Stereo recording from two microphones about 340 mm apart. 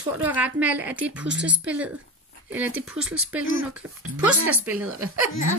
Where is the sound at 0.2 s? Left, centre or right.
Centre.